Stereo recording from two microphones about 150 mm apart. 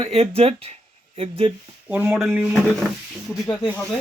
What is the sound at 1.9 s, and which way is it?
Speech, 5° right (ahead or behind).